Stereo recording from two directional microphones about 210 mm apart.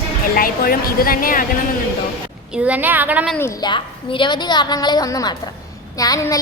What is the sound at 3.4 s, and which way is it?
A woman's voice, 20° left (ahead or behind).